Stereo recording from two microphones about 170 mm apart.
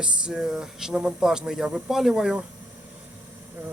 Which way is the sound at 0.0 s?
5° right (ahead or behind).